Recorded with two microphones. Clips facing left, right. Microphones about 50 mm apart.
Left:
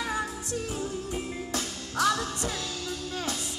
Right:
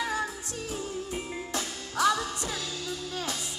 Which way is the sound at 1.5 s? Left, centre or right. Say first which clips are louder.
Left 1 dB; centre.